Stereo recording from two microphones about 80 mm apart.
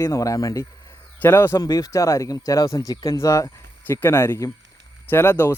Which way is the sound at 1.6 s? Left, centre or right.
Left.